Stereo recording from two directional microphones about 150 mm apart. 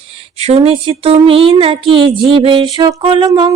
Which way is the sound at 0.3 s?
40° right (ahead or behind).